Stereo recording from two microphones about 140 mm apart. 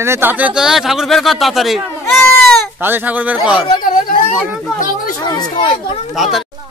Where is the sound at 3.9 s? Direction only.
75° left (ahead or behind).